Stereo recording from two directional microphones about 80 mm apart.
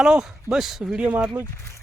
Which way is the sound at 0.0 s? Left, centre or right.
Centre.